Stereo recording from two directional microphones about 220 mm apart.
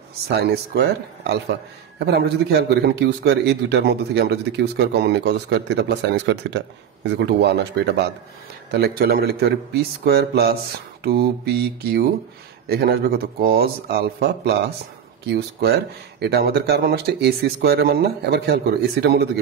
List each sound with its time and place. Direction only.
0.3 s speech: 45° right (ahead or behind)